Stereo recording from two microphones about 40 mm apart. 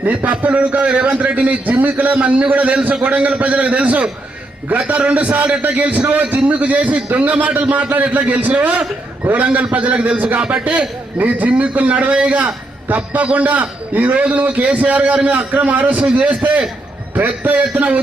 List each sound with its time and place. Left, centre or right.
0.3 s a man's voice: right
2.1 s a man's voice: right